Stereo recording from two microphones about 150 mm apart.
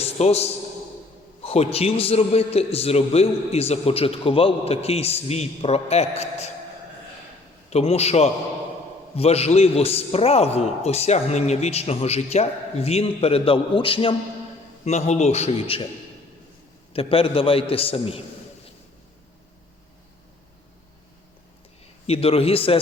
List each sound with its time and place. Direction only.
0.0 s a sound: 45° left (ahead or behind)
1.4 s a man's voice: 40° left (ahead or behind)
7.7 s a man's voice: 45° left (ahead or behind)
14.8 s a man's voice: 50° left (ahead or behind)
16.9 s a man's voice: 40° left (ahead or behind)
22.0 s a man's voice: 40° left (ahead or behind)